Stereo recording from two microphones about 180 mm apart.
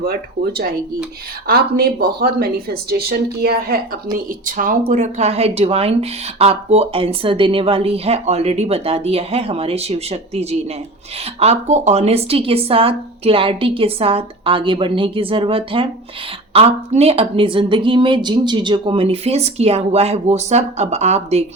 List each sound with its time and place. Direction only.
0.0 s speech: 55° right (ahead or behind)
4.4 s speech: 50° right (ahead or behind)